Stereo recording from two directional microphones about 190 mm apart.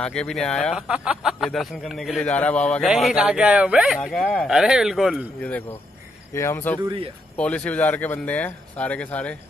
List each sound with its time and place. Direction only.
0.0 s speech: 5° left (ahead or behind)
6.8 s speech: 25° right (ahead or behind)
7.3 s speech: 5° left (ahead or behind)